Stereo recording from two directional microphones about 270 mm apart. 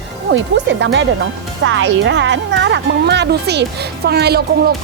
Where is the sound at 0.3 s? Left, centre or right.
Right.